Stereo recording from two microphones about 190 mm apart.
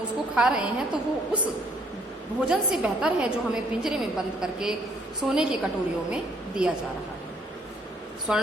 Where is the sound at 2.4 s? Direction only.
5° right (ahead or behind).